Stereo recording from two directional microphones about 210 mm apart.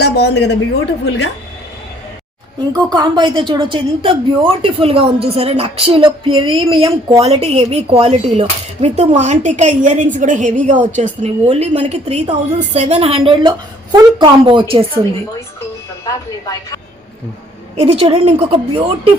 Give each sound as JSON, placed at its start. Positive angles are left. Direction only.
{"t": 0.0, "sound": "a sound", "side_deg": 50}
{"t": 1.0, "sound": "speech", "side_deg": 70}
{"t": 2.7, "sound": "a woman's voice", "side_deg": -20}
{"t": 17.7, "sound": "a woman's voice", "side_deg": -30}